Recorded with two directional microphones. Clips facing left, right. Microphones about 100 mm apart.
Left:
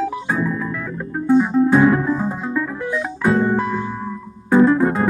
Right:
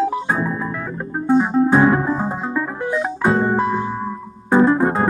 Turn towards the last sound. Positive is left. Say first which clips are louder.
# left 1 dB
turn(degrees=-30)  # may be behind; listen again after turning